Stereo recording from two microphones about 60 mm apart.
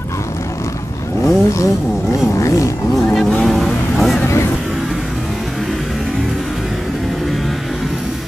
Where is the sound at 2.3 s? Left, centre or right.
Left.